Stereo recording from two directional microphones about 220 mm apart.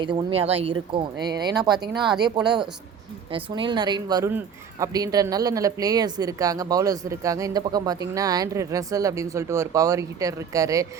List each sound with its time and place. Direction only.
0.0 s speech: 20° right (ahead or behind)